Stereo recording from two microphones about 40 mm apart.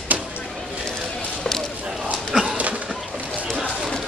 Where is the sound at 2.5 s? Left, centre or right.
Right.